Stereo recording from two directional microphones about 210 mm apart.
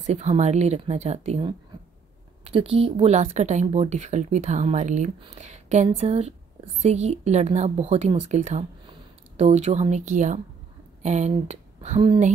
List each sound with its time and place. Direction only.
0.0 s a woman's voice: 30° right (ahead or behind)